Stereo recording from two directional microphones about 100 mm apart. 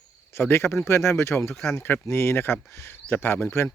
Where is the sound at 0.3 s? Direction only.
25° left (ahead or behind).